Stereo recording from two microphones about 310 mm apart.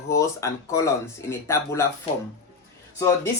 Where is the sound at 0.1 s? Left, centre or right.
Centre.